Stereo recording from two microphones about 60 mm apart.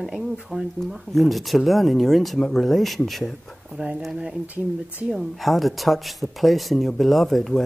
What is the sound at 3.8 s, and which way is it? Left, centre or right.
Speech, centre.